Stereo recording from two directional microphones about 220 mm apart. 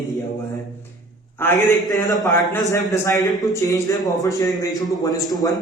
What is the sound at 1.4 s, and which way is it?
A man's voice, 10° left (ahead or behind).